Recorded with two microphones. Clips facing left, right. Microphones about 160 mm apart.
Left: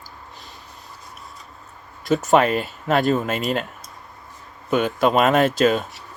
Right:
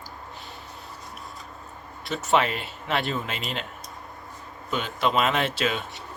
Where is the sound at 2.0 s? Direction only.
45° left (ahead or behind).